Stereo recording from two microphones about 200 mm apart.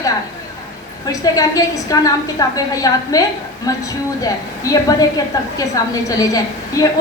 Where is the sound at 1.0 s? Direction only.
20° left (ahead or behind).